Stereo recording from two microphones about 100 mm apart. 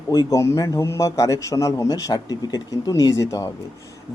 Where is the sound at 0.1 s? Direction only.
35° left (ahead or behind).